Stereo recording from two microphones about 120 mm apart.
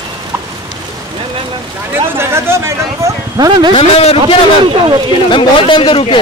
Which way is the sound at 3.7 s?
55° left (ahead or behind).